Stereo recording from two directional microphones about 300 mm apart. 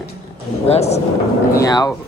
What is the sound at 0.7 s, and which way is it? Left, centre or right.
A man's voice, left.